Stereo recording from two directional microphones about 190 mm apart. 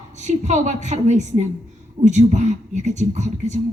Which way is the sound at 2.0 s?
40° right (ahead or behind).